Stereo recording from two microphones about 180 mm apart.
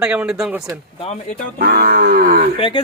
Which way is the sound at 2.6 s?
30° left (ahead or behind).